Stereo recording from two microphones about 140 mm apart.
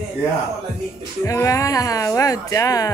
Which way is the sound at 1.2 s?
25° left (ahead or behind).